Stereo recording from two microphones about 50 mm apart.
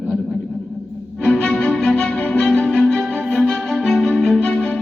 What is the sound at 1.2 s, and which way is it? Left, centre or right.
Music, centre.